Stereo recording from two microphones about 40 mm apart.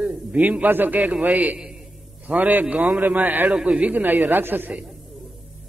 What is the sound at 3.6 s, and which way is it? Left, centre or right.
Speech, right.